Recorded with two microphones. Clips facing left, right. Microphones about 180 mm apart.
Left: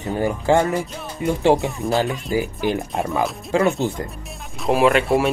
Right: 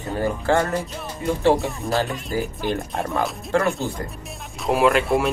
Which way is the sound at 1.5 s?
Centre (ahead or behind).